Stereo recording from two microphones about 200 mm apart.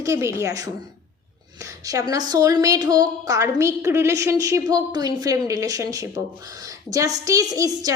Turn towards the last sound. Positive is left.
turn(degrees=-20)  # may be behind; listen again after turning